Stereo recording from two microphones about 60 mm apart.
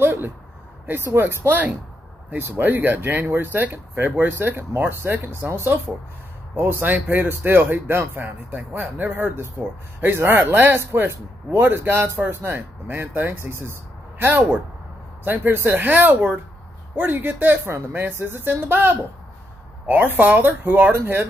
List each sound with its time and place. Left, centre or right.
0.0 s a sound: right
0.8 s speech: right
6.5 s speech: right
20.9 s speech: right